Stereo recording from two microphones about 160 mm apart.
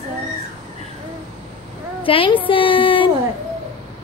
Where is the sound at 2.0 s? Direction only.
35° left (ahead or behind).